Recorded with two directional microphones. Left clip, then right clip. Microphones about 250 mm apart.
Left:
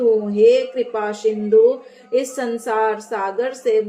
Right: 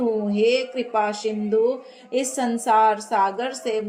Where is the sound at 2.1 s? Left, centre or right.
Right.